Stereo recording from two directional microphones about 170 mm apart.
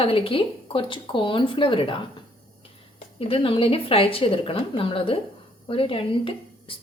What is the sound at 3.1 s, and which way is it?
A woman's voice, 35° left (ahead or behind).